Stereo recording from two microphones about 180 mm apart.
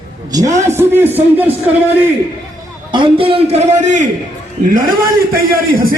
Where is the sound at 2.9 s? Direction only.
30° right (ahead or behind); by 5.9 s 55° right (ahead or behind).